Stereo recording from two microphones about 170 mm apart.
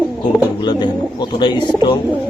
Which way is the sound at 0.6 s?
25° left (ahead or behind).